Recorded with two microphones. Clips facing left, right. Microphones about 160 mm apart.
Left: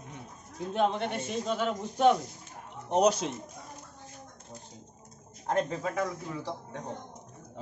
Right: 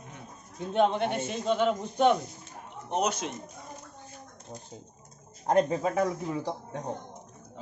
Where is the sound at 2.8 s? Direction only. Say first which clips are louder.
Left 5 dB; 35° left (ahead or behind).